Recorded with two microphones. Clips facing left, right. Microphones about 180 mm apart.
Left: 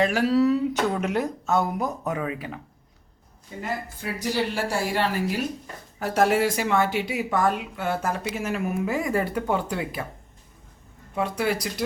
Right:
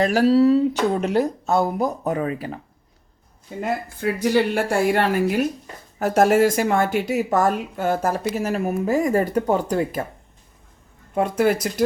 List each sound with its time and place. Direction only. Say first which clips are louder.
0.0 s speech: right 5 dB; 40° right (ahead or behind)
3.6 s a woman's voice: right 7 dB; 60° right (ahead or behind); by 10.1 s 45° right (ahead or behind)
11.1 s speech: right 6 dB; 50° right (ahead or behind)